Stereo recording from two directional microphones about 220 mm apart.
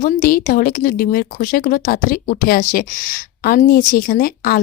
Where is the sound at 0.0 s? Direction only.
40° left (ahead or behind).